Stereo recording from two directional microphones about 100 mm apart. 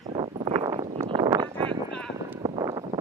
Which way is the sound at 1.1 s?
40° right (ahead or behind).